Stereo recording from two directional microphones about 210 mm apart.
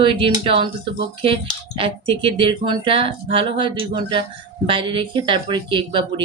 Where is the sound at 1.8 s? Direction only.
25° right (ahead or behind).